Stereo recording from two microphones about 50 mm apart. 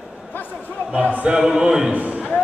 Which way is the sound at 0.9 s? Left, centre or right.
Right.